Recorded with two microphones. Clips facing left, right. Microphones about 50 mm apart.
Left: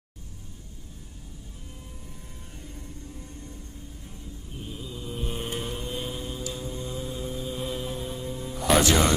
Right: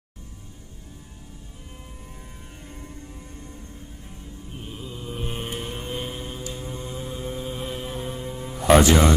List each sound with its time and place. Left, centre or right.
2.6 s music: right
5.4 s music: right
6.6 s mantra: right
7.6 s music: right